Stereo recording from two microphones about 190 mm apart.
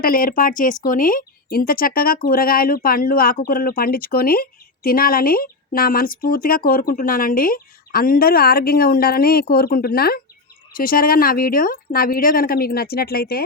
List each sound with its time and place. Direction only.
0.0 s speech: 50° left (ahead or behind)